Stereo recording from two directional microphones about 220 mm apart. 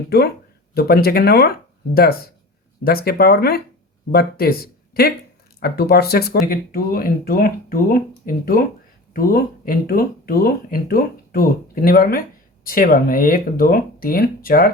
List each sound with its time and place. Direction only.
0.7 s speech: 45° left (ahead or behind)